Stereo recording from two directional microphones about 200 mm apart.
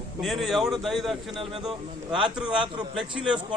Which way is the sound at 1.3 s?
25° right (ahead or behind).